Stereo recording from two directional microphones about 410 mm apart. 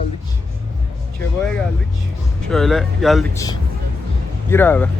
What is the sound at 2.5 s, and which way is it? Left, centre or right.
Speech, centre.